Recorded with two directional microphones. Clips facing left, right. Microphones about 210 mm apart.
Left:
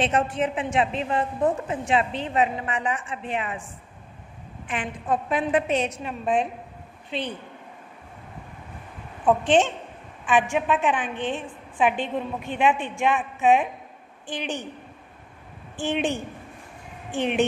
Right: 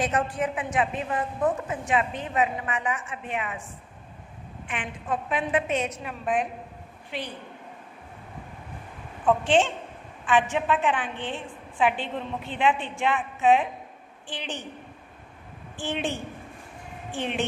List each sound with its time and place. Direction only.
0.0 s a woman's voice: 25° left (ahead or behind)
4.6 s a woman's voice: 40° left (ahead or behind); by 7.3 s 20° left (ahead or behind)
9.2 s a woman's voice: 20° left (ahead or behind)
15.7 s a woman's voice: 15° left (ahead or behind)
17.2 s a woman's voice: 15° left (ahead or behind)